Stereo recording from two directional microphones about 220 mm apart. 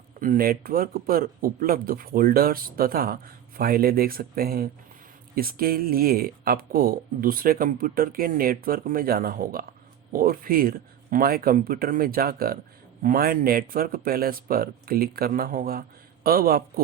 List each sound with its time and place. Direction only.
0.2 s speech: 40° right (ahead or behind)